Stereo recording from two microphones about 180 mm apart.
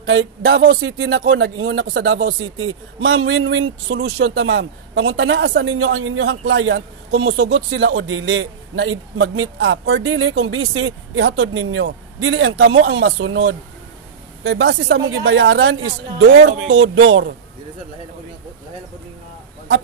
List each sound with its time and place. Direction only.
0.0 s speech: 80° right
14.4 s speech: 75° right (ahead or behind)